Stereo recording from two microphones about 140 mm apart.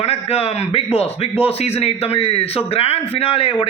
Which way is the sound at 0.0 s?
45° left (ahead or behind).